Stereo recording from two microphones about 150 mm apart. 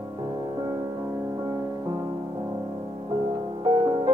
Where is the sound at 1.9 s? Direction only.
30° right (ahead or behind).